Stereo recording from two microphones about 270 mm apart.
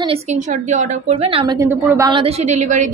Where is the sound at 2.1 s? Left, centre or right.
Right.